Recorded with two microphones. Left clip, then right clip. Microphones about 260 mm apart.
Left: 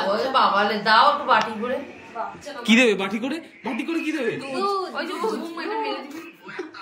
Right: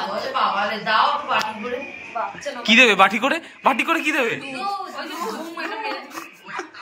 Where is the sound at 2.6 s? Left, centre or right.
Centre.